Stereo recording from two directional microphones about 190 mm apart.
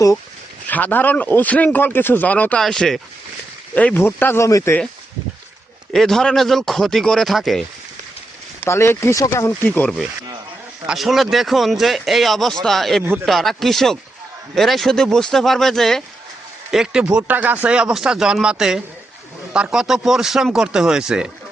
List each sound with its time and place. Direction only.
0.7 s speech: 10° left (ahead or behind)
5.9 s speech: centre (ahead or behind)
8.6 s speech: 15° left (ahead or behind); by 21.2 s 5° right (ahead or behind)